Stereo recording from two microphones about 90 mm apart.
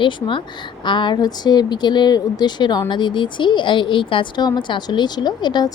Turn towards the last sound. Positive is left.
turn(degrees=55)  # may be behind; listen again after turning